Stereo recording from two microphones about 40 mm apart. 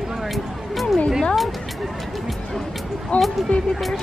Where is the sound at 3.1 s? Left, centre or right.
Left.